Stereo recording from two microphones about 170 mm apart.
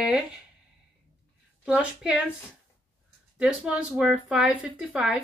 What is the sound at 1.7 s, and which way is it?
Speech, 5° right (ahead or behind).